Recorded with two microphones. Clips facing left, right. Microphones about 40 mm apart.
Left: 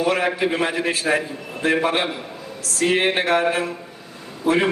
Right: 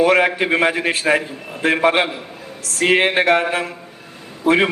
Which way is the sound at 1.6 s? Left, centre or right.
Right.